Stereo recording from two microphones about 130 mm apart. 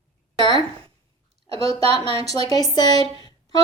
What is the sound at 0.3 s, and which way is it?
Speech, 35° left (ahead or behind).